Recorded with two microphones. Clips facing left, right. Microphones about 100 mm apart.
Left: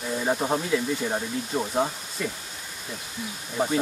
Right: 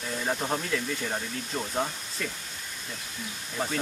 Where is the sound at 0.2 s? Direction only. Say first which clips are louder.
Left 4 dB; 15° left (ahead or behind).